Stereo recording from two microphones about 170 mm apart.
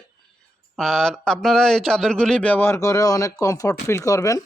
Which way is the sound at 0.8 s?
5° left (ahead or behind).